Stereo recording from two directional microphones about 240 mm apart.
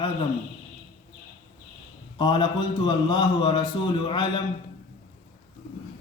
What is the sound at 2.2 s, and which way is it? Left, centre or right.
Speech, centre.